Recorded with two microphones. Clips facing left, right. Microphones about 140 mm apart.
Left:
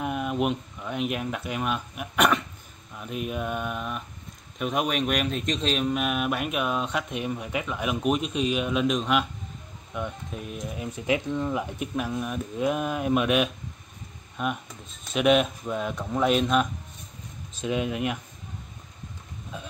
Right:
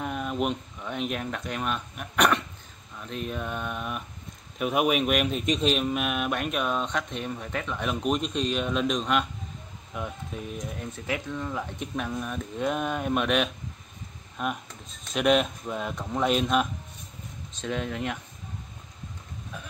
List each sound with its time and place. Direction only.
0.0 s speech: 5° left (ahead or behind)
3.0 s mantra: 10° left (ahead or behind)
4.6 s speech: 5° right (ahead or behind)
11.1 s mantra: 15° left (ahead or behind)
11.8 s speech: 5° left (ahead or behind)
17.6 s mantra: 10° left (ahead or behind)